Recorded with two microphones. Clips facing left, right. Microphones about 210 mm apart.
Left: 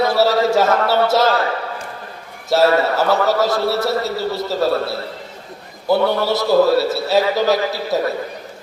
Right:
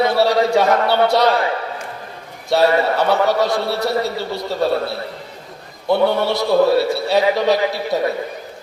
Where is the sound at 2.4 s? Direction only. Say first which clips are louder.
Even; centre (ahead or behind).